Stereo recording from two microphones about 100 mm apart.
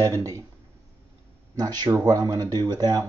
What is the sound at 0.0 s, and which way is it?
Speech, 35° right (ahead or behind).